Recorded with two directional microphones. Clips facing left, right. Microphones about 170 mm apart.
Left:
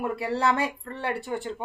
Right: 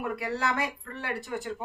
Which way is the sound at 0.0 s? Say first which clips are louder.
Left 5 dB; 30° left (ahead or behind).